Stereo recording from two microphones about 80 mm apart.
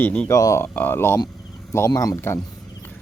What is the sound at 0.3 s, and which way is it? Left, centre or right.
Speech, left.